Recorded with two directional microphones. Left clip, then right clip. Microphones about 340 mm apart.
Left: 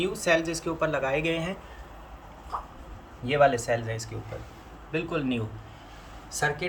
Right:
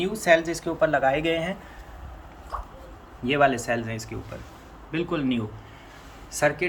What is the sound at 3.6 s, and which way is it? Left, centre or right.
Speech, centre.